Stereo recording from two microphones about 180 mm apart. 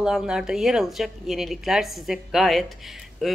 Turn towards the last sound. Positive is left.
turn(degrees=0)  # may be behind; listen again after turning